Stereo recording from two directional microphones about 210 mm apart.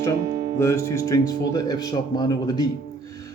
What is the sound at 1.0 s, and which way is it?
Speech, 15° left (ahead or behind).